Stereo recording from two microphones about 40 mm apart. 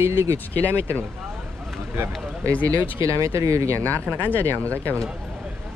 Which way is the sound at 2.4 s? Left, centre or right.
Left.